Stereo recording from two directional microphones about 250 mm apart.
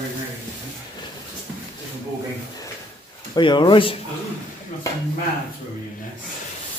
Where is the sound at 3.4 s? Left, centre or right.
Centre.